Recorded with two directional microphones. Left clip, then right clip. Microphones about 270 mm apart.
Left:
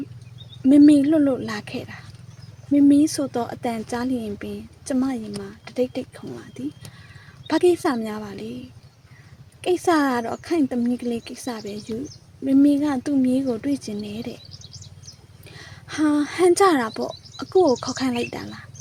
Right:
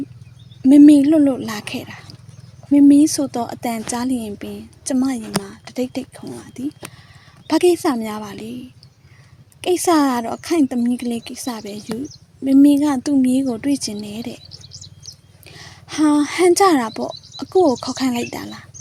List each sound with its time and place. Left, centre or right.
0.6 s a woman's voice: right
9.6 s a woman's voice: right
14.6 s bird: centre
15.4 s speech: right